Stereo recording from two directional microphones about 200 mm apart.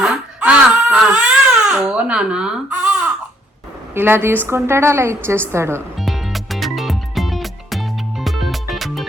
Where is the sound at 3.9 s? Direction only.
10° right (ahead or behind).